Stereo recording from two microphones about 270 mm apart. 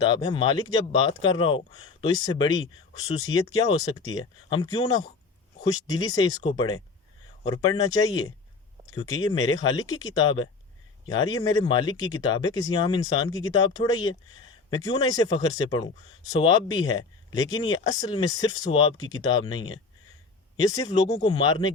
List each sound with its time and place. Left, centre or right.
0.0 s speech: centre